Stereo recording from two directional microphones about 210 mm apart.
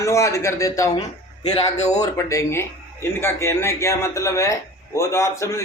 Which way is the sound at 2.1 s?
15° left (ahead or behind).